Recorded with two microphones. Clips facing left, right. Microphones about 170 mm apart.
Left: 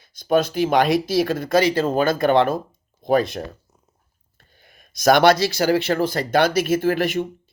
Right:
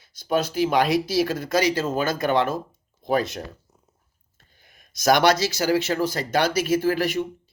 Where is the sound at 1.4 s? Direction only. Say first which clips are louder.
Left 4 dB; 25° left (ahead or behind).